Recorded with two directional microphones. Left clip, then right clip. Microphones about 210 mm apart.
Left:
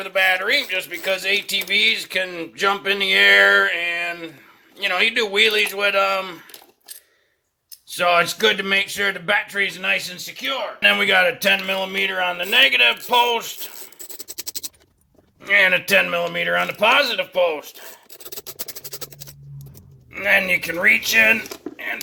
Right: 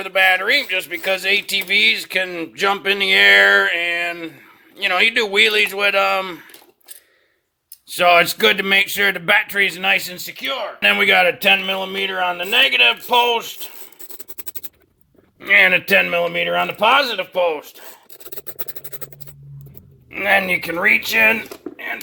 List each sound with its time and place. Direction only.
0.0 s speech: 45° right (ahead or behind)
7.9 s speech: 45° right (ahead or behind); by 13.4 s 25° right (ahead or behind)
13.4 s speech: centre (ahead or behind)
15.4 s speech: 35° right (ahead or behind)
20.1 s speech: 35° right (ahead or behind)
21.7 s a sound: 5° left (ahead or behind)